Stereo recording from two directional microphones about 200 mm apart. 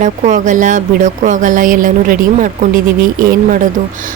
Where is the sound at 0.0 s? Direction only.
40° right (ahead or behind).